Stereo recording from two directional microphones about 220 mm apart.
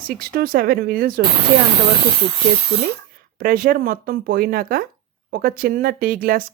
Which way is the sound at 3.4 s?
40° right (ahead or behind).